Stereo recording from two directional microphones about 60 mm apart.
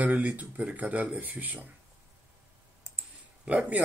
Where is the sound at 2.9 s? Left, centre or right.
Left.